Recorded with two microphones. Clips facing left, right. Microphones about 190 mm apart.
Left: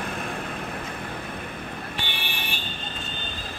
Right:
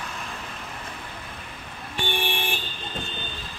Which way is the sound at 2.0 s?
50° right (ahead or behind).